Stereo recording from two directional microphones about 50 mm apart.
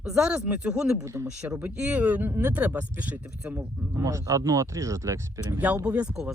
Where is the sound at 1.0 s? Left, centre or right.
Right.